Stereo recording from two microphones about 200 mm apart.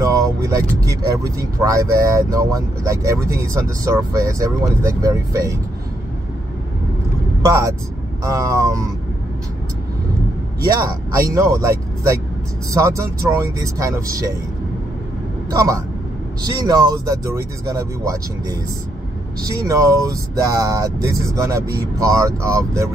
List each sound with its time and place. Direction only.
0.0 s speech: 15° right (ahead or behind)
7.4 s speech: 15° right (ahead or behind)
10.6 s speech: 20° right (ahead or behind)
15.5 s speech: 15° right (ahead or behind)